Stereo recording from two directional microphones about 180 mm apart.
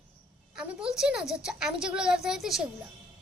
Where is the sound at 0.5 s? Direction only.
5° right (ahead or behind).